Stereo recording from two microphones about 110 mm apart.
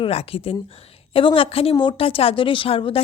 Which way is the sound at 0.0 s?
65° left (ahead or behind).